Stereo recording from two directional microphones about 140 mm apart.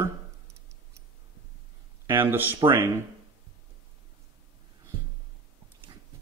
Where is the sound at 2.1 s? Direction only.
15° right (ahead or behind).